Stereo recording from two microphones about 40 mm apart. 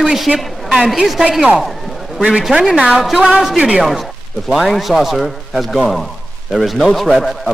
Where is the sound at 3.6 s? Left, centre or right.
Right.